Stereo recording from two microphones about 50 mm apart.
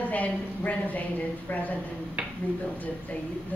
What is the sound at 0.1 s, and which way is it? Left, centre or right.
A woman's voice, left.